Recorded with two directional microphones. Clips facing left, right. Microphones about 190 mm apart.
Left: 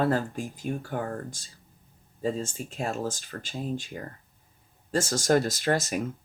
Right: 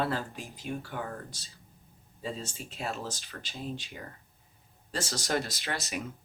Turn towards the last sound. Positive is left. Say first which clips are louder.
# left 9 dB
turn(degrees=45)  # may be behind; listen again after turning